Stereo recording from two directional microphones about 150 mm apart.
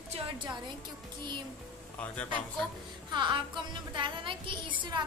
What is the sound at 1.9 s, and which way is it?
Speech, 10° left (ahead or behind).